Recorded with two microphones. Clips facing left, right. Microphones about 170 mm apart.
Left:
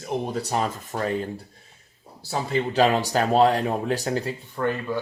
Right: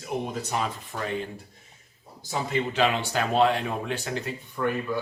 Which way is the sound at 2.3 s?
35° left (ahead or behind).